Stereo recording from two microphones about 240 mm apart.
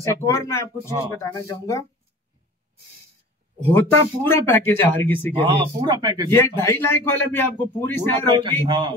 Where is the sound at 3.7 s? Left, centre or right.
Centre.